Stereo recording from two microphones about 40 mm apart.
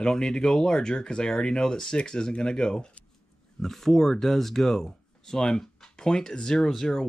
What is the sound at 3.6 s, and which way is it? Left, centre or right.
Speech, centre.